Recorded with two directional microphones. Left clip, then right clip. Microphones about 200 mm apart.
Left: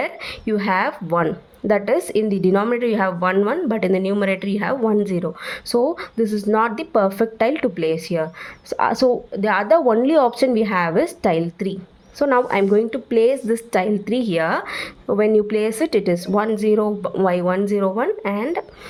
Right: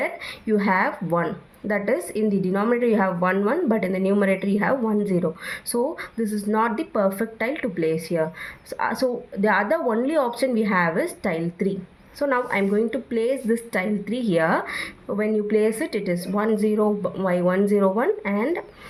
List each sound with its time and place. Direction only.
0.0 s speech: 40° left (ahead or behind)